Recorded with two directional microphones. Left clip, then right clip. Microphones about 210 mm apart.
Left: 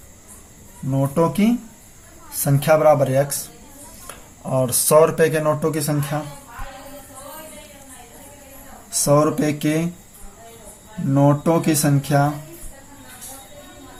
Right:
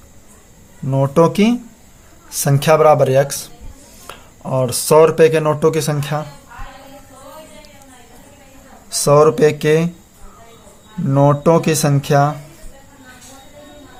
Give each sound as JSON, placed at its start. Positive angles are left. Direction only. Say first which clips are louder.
{"t": 0.9, "sound": "speech", "louder": "right 6 dB", "side_deg": -50}
{"t": 4.0, "sound": "speech", "louder": "right 4 dB", "side_deg": -35}
{"t": 9.0, "sound": "speech", "louder": "right 7 dB", "side_deg": -50}
{"t": 11.1, "sound": "speech", "louder": "right 5 dB", "side_deg": -50}